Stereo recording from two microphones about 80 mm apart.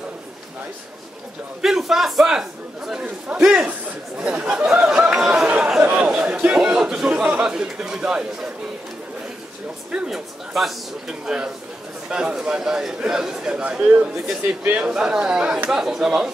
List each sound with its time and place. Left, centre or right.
1.6 s a man's voice: centre
4.8 s a sound: centre
5.8 s a man's voice: centre
9.8 s a man's voice: centre
14.6 s speech: right
14.9 s a man's voice: centre